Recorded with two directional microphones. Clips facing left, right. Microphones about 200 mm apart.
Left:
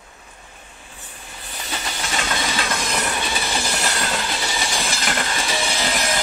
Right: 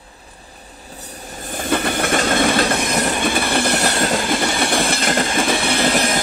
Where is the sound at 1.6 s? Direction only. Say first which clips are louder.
Right 11 dB; 55° right (ahead or behind).